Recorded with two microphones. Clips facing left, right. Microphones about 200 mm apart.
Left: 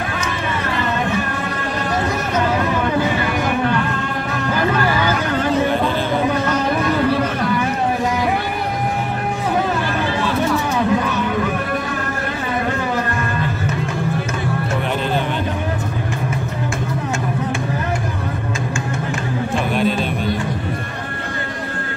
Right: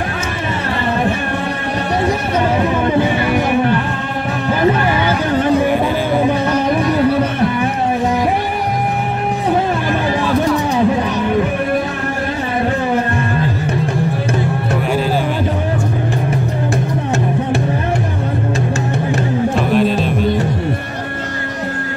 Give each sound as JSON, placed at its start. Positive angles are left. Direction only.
{"t": 2.6, "sound": "a sound", "side_deg": -20}
{"t": 4.5, "sound": "music", "side_deg": -25}
{"t": 19.7, "sound": "music", "side_deg": 0}